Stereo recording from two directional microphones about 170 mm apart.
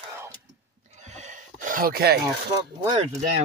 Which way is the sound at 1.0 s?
45° right (ahead or behind).